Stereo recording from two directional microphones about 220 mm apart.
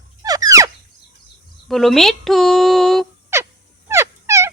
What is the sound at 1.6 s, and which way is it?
Speech, centre (ahead or behind).